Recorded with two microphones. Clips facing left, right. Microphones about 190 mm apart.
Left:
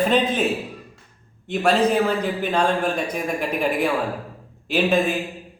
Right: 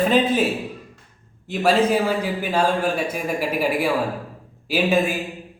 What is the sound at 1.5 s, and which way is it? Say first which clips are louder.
A man's voice: right 1 dB; 5° right (ahead or behind).